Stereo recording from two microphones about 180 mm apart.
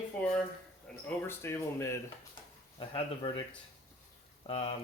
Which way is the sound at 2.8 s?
30° left (ahead or behind).